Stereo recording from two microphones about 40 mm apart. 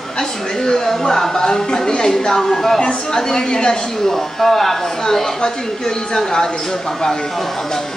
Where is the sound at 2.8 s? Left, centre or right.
Left.